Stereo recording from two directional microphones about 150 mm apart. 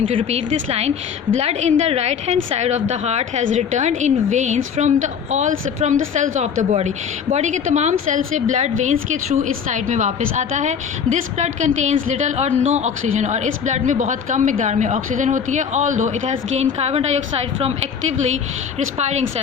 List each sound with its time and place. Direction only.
0.0 s a woman's voice: 35° right (ahead or behind); by 16.1 s 55° right (ahead or behind)
16.6 s a woman's voice: 45° right (ahead or behind)
18.9 s a woman's voice: 50° right (ahead or behind)